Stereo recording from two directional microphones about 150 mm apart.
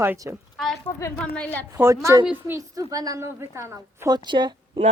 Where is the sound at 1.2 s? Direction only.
10° left (ahead or behind).